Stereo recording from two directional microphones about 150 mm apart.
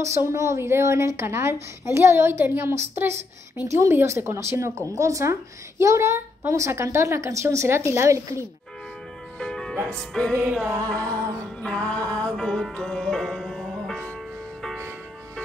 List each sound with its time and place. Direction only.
0.0 s speech: 20° right (ahead or behind)
9.4 s music: 5° left (ahead or behind)
10.3 s speech: 10° right (ahead or behind)
10.9 s music: 10° left (ahead or behind)